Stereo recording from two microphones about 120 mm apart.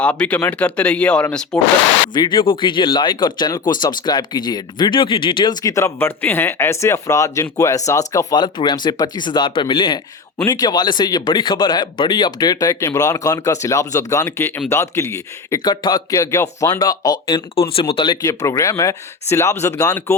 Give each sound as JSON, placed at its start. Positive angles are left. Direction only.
{"t": 0.0, "sound": "speech", "side_deg": 10}
{"t": 2.1, "sound": "speech", "side_deg": 40}
{"t": 15.6, "sound": "speech", "side_deg": 40}
{"t": 17.5, "sound": "speech", "side_deg": 50}
{"t": 18.2, "sound": "speech", "side_deg": 25}